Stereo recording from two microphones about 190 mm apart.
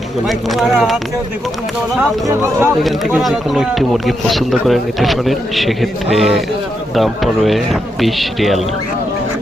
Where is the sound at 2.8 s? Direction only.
Centre (ahead or behind).